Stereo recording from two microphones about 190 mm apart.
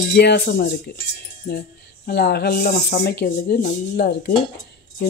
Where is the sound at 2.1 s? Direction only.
60° left (ahead or behind).